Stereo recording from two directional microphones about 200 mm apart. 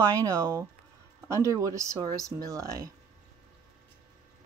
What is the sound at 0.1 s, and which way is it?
Speech, 15° right (ahead or behind).